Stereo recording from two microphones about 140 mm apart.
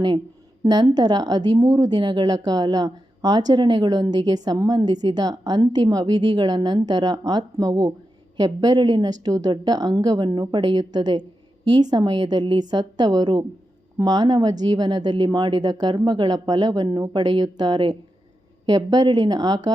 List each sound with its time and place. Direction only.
0.6 s a woman's voice: 30° right (ahead or behind)